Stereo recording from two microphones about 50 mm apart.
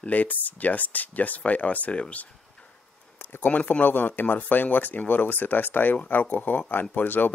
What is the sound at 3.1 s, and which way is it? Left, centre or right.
Speech, left.